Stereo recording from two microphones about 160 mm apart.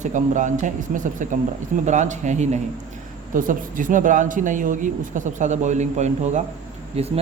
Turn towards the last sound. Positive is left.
turn(degrees=-40)  # may be behind; listen again after turning